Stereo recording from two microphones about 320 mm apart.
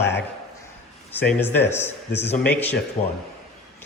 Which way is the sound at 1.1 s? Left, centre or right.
Centre.